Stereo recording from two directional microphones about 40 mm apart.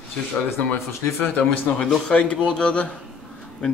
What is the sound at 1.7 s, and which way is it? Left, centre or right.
A man's voice, left.